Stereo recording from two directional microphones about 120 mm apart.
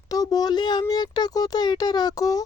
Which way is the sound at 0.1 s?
30° left (ahead or behind).